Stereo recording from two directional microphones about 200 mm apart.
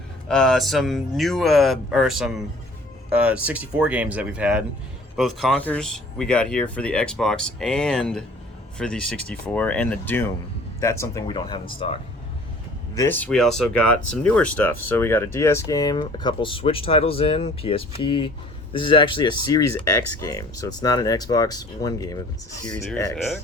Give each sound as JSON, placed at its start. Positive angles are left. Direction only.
{"t": 0.3, "sound": "speech", "side_deg": 5}
{"t": 12.9, "sound": "speech", "side_deg": 15}
{"t": 22.6, "sound": "speech", "side_deg": 5}